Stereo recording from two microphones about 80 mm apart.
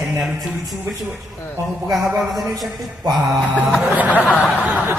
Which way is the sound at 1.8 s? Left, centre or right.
Centre.